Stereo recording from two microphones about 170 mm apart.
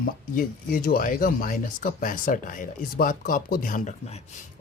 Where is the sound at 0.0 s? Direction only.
55° left (ahead or behind).